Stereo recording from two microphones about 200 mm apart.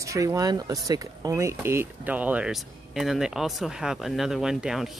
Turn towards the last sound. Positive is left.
turn(degrees=0)  # may be behind; listen again after turning